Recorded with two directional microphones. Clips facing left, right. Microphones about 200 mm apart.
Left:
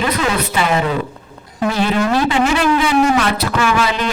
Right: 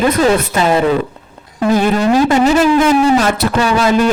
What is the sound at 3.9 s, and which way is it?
Speech, 45° right (ahead or behind).